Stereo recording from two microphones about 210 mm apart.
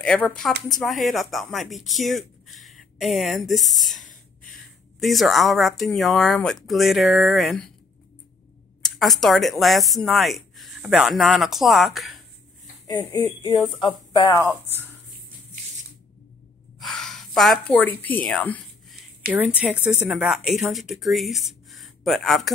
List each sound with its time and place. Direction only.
0.0 s speech: 5° left (ahead or behind)
8.8 s speech: centre (ahead or behind)
13.4 s speech: 15° left (ahead or behind)
16.8 s speech: centre (ahead or behind)
19.3 s speech: 5° right (ahead or behind)